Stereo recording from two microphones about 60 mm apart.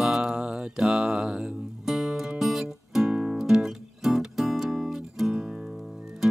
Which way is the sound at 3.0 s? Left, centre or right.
Centre.